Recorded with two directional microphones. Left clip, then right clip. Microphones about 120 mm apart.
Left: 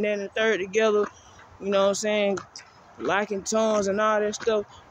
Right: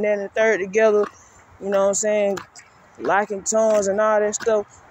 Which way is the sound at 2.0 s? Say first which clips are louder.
Right 4 dB; 40° left (ahead or behind).